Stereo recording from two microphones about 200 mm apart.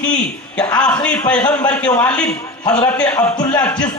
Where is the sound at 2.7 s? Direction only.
20° left (ahead or behind).